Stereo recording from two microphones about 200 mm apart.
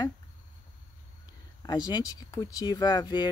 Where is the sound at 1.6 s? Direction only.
20° left (ahead or behind).